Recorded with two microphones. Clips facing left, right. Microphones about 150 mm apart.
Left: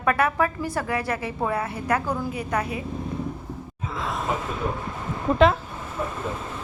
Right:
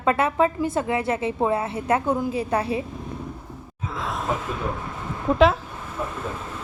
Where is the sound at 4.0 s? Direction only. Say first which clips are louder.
Even; centre (ahead or behind).